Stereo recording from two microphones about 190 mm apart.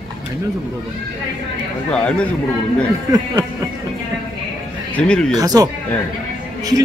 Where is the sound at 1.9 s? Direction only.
5° left (ahead or behind).